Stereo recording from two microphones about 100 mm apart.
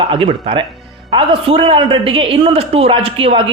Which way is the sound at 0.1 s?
70° right (ahead or behind).